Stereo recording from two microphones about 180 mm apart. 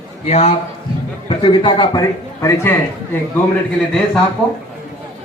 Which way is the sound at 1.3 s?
25° left (ahead or behind).